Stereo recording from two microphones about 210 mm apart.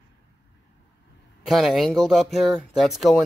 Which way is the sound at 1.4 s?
Centre (ahead or behind).